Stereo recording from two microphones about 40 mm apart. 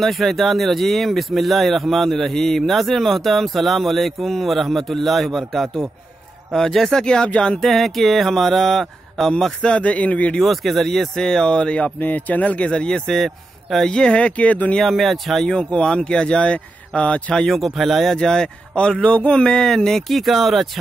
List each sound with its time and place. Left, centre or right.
0.0 s speech: centre
7.5 s speech: centre
9.6 s speech: left
9.8 s speech: left
10.4 s speech: centre; by 11.9 s left
12.0 s speech: left
12.9 s a man's voice: centre
13.8 s speech: left
14.1 s speech: left
14.8 s speech: centre
15.4 s speech: centre
17.5 s speech: centre
18.1 s speech: centre
19.8 s speech: centre